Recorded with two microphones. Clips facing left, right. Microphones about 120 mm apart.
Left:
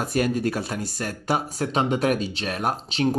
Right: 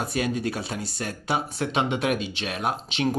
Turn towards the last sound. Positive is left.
turn(degrees=35)  # may be behind; listen again after turning